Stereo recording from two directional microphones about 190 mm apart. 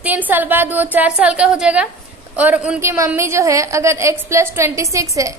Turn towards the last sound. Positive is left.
turn(degrees=-15)  # may be behind; listen again after turning